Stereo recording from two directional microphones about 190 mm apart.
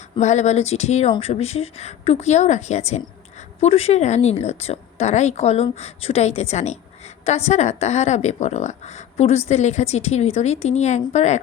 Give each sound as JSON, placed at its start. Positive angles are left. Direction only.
{"t": 0.2, "sound": "speech", "side_deg": 35}